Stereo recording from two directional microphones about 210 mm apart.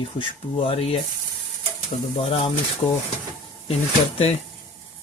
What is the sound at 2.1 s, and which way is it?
Speech, 25° left (ahead or behind).